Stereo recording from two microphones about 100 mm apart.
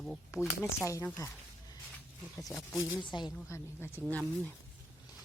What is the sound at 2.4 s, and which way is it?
Speech, centre (ahead or behind).